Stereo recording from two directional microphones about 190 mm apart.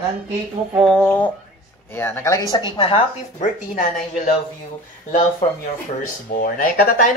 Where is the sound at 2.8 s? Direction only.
30° left (ahead or behind).